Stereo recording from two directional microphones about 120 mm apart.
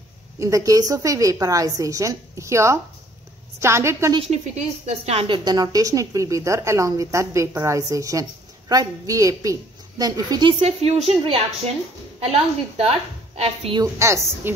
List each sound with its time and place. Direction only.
0.4 s a woman's voice: 30° right (ahead or behind)
4.2 s a woman's voice: 70° right (ahead or behind); by 5.4 s 55° right (ahead or behind)
5.4 s a woman's voice: 35° right (ahead or behind)
10.6 s a woman's voice: 60° right (ahead or behind)
13.9 s a woman's voice: 25° right (ahead or behind)